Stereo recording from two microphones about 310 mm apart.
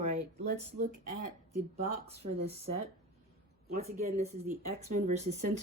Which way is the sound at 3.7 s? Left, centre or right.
Right.